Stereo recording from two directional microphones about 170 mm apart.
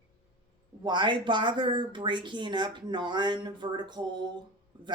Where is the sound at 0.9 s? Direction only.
25° right (ahead or behind).